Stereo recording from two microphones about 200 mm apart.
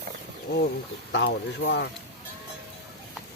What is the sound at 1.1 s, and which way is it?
Speech, 60° left (ahead or behind).